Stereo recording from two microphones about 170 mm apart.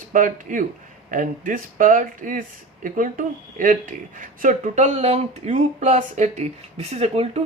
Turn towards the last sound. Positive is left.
turn(degrees=-35)  # may be behind; listen again after turning